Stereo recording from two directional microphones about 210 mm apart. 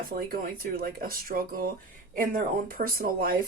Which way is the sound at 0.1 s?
45° right (ahead or behind).